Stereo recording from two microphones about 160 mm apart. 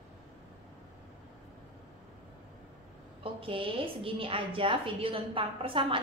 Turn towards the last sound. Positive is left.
turn(degrees=-35)  # may be behind; listen again after turning